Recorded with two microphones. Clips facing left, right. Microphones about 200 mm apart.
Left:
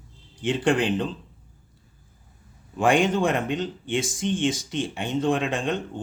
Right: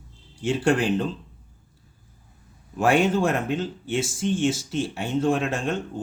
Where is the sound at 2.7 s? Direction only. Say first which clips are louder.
Even; 5° right (ahead or behind).